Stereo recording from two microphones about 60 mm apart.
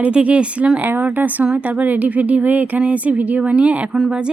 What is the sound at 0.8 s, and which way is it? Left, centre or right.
Speech, right.